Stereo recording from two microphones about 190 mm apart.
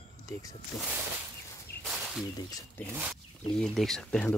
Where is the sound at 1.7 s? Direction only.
55° left (ahead or behind).